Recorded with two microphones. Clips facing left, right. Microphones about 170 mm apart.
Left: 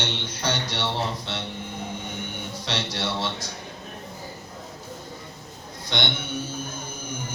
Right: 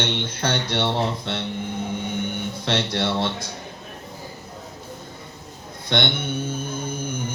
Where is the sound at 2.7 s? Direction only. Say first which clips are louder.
Right 6 dB; 55° right (ahead or behind).